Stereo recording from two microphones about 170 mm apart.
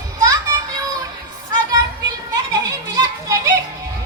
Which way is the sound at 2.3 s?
20° right (ahead or behind).